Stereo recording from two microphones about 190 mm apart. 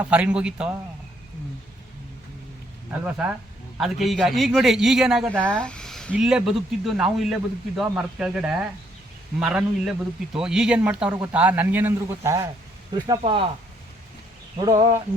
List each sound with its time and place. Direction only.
0.0 s a man's voice: 5° right (ahead or behind)
3.0 s a man's voice: 5° right (ahead or behind)
11.1 s a man's voice: 20° right (ahead or behind)
14.6 s speech: 20° right (ahead or behind)